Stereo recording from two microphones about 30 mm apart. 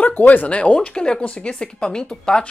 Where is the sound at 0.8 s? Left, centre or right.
Left.